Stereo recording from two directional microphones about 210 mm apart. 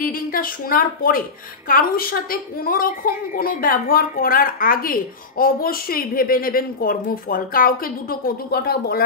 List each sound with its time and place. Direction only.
0.0 s a woman's voice: 40° left (ahead or behind)